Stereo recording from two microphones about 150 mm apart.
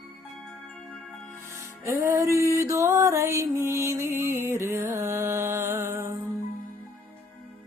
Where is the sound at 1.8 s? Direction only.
20° right (ahead or behind).